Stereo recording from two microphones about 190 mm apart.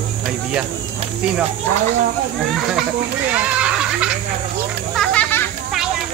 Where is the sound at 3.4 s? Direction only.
5° right (ahead or behind).